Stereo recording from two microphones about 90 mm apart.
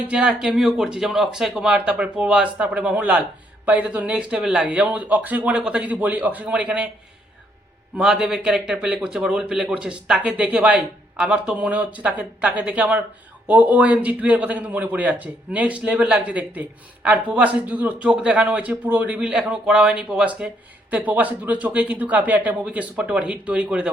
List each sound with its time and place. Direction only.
0.1 s speech: 10° right (ahead or behind)
7.9 s speech: 10° right (ahead or behind)